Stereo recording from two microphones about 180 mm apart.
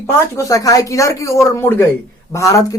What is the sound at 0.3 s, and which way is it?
Speech, 20° left (ahead or behind).